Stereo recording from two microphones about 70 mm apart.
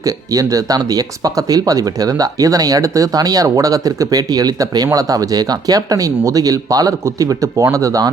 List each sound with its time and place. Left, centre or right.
0.0 s speech: right